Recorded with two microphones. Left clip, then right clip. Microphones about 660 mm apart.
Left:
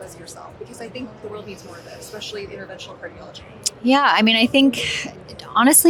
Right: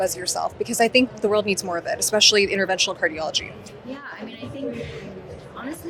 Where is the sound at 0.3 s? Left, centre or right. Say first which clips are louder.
Right 12 dB; right.